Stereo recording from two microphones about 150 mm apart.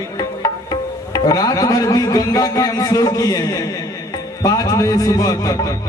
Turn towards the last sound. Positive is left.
turn(degrees=25)  # may be behind; listen again after turning